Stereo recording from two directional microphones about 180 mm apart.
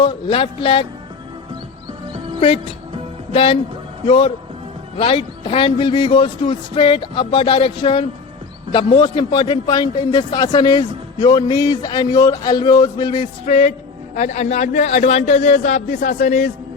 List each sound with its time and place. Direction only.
0.0 s a man's voice: 30° left (ahead or behind)
3.3 s a man's voice: 30° left (ahead or behind)
13.4 s a man's voice: 40° left (ahead or behind)